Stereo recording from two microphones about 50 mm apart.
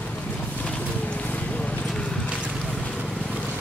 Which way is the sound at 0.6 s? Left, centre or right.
Left.